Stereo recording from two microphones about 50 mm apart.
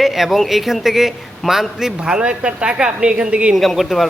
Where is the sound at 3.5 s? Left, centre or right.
Centre.